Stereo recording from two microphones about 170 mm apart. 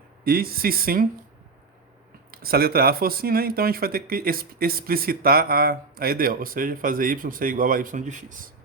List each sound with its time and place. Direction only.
0.3 s speech: 60° right (ahead or behind)
2.3 s speech: 60° right (ahead or behind)